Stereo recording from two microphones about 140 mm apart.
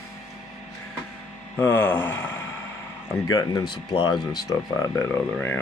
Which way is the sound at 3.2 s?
30° left (ahead or behind).